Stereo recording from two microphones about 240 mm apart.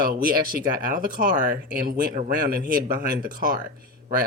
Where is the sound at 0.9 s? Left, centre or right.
Right.